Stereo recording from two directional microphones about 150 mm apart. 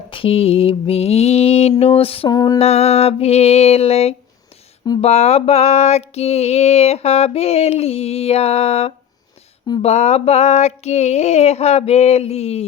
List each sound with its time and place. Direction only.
0.1 s mantra: 40° left (ahead or behind)
2.3 s female singing: 25° left (ahead or behind)
2.6 s mantra: 45° left (ahead or behind)